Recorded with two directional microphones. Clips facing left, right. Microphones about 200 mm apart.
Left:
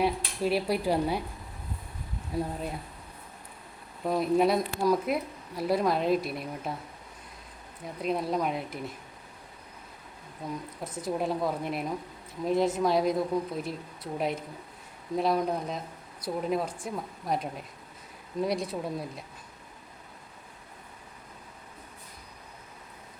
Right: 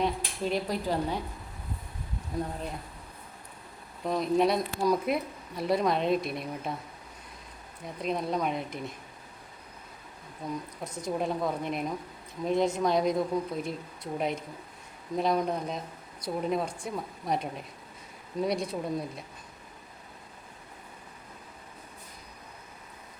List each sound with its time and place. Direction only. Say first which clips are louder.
0.0 s dishes: left 2 dB; 10° left (ahead or behind)
2.3 s speech: left 2 dB; 5° left (ahead or behind)
4.0 s speech: left 1 dB; 5° left (ahead or behind)
8.0 s speech: left 1 dB; 5° left (ahead or behind)
10.9 s speech: left 1 dB; 5° left (ahead or behind)